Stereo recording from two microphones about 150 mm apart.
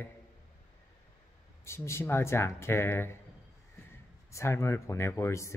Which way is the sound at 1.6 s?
15° left (ahead or behind).